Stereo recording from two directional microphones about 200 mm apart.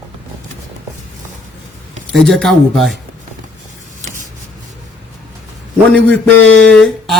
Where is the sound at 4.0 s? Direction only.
40° right (ahead or behind).